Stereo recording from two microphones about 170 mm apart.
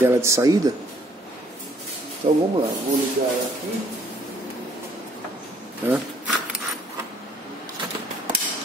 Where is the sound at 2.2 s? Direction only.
45° right (ahead or behind).